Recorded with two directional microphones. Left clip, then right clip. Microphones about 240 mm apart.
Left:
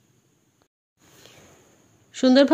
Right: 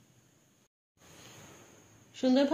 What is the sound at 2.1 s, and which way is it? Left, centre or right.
Speech, left.